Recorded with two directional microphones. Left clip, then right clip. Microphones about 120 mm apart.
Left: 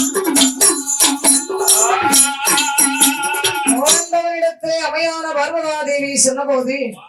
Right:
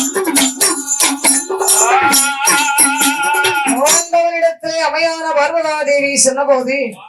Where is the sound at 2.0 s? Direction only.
15° left (ahead or behind).